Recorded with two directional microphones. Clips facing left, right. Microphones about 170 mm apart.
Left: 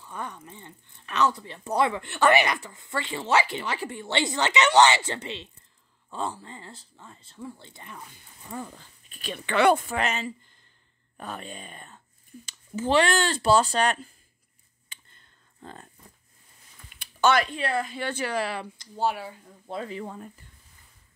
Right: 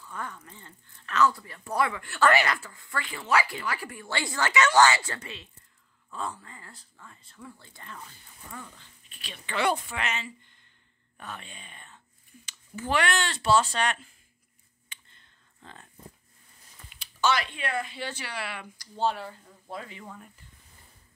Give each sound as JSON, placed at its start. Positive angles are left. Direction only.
{"t": 0.0, "sound": "speech", "side_deg": 20}
{"t": 8.5, "sound": "speech", "side_deg": 35}
{"t": 9.5, "sound": "speech", "side_deg": 60}
{"t": 9.8, "sound": "speech", "side_deg": 40}
{"t": 12.4, "sound": "speech", "side_deg": 25}
{"t": 15.6, "sound": "speech", "side_deg": 40}
{"t": 17.0, "sound": "a sound", "side_deg": 55}
{"t": 17.6, "sound": "speech", "side_deg": 35}
{"t": 17.9, "sound": "speech", "side_deg": 50}
{"t": 18.9, "sound": "speech", "side_deg": 10}
{"t": 19.7, "sound": "speech", "side_deg": 35}